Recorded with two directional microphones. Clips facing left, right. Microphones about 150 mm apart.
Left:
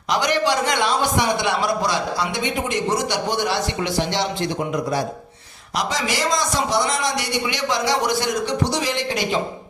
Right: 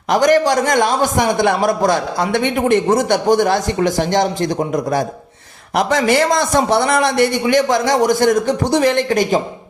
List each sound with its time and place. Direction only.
0.1 s a man's voice: 45° right (ahead or behind)
5.7 s a man's voice: 55° right (ahead or behind)